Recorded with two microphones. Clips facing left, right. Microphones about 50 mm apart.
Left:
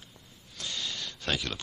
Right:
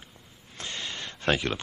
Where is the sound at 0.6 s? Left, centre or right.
Right.